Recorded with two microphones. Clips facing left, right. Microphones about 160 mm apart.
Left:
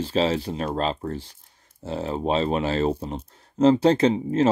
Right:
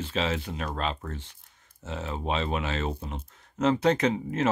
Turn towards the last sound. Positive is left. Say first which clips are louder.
# left 6 dB
turn(degrees=30)  # may be behind; listen again after turning